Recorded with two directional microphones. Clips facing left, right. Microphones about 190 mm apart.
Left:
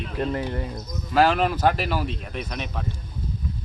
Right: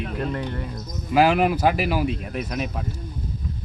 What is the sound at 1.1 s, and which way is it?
A man's voice, 10° right (ahead or behind).